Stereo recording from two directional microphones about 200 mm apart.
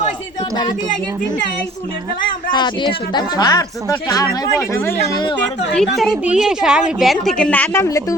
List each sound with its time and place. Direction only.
2.5 s speech: 20° left (ahead or behind)
5.7 s a woman's voice: 5° left (ahead or behind)